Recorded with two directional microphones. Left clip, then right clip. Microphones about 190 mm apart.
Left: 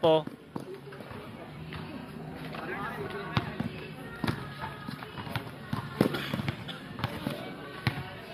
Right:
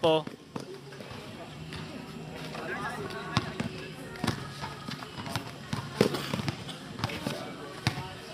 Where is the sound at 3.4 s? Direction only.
55° right (ahead or behind).